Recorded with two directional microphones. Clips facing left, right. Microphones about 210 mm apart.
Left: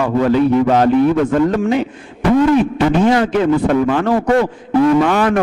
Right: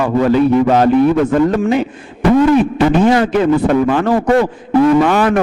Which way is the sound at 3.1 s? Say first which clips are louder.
Right 2 dB; 10° right (ahead or behind).